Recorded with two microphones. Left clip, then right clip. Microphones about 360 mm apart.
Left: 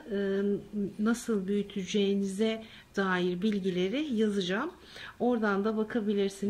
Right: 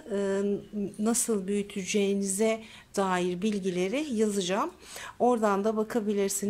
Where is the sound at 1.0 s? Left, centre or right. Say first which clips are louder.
Right 3 dB; centre.